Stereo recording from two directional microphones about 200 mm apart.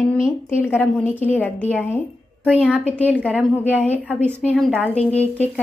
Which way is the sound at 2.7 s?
5° right (ahead or behind).